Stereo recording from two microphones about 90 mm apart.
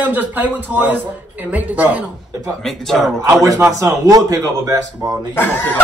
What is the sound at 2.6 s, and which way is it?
Speech, 5° left (ahead or behind).